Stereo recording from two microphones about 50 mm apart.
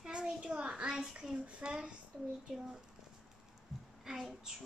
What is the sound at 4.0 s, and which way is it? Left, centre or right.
Speech, centre.